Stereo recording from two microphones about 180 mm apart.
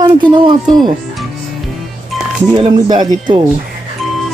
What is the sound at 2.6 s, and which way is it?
Speech, 25° right (ahead or behind).